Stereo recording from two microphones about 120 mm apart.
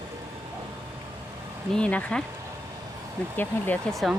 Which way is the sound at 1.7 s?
10° left (ahead or behind).